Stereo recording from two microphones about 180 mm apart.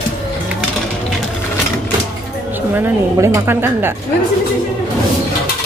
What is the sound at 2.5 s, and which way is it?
A woman's voice, 10° right (ahead or behind).